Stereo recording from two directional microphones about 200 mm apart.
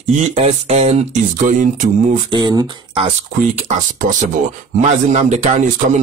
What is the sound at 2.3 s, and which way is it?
Speech, 20° right (ahead or behind).